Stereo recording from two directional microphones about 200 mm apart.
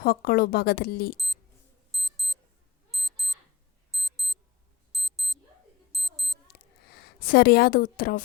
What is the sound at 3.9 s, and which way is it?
Alarm clock, centre (ahead or behind).